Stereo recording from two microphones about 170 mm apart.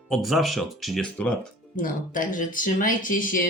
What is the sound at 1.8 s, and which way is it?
Speech, 50° left (ahead or behind).